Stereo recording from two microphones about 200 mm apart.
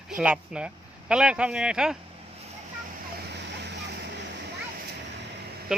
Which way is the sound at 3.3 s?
60° right (ahead or behind).